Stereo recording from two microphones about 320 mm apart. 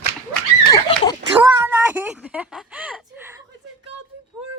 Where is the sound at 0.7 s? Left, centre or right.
Centre.